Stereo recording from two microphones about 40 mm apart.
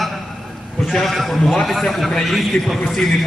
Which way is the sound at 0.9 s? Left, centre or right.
Centre.